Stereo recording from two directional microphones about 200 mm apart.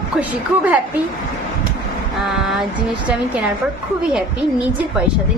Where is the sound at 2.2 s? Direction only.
Centre (ahead or behind).